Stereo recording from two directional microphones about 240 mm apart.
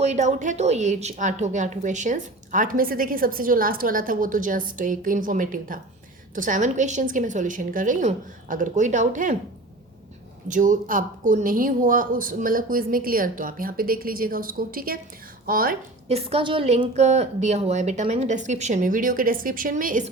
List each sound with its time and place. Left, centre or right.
0.0 s a woman's voice: right
10.5 s a woman's voice: right
16.1 s a woman's voice: right